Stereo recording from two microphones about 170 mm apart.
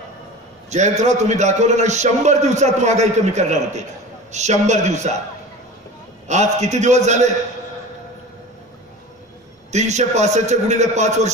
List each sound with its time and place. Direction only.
0.7 s a man's voice: 45° right (ahead or behind)
6.2 s a man's voice: 40° right (ahead or behind)
9.7 s a man's voice: 40° right (ahead or behind)